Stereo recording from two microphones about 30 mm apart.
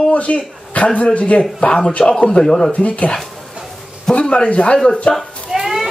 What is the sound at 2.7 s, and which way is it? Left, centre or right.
Speech, left.